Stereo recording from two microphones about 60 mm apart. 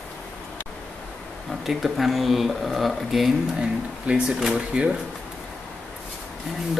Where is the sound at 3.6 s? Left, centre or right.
Centre.